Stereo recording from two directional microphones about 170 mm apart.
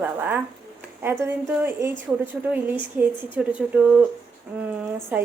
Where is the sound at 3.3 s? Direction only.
10° right (ahead or behind).